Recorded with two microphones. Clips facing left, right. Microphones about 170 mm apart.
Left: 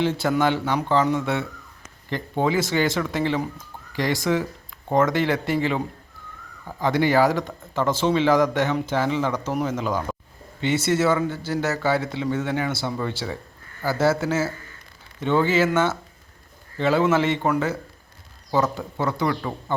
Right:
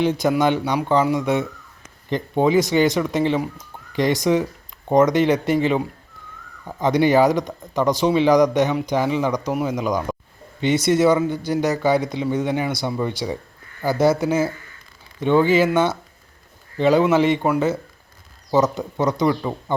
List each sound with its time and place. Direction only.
0.0 s speech: 20° right (ahead or behind)